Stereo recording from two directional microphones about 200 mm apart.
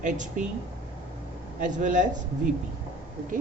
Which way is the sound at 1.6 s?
40° right (ahead or behind).